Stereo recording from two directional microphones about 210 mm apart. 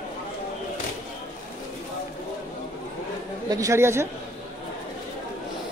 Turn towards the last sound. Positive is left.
turn(degrees=-10)  # may be behind; listen again after turning